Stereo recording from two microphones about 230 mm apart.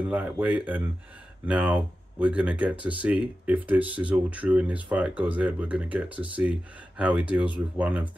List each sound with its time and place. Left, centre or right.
0.1 s speech: centre